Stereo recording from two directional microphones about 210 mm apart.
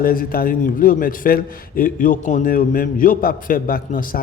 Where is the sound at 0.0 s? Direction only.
45° left (ahead or behind).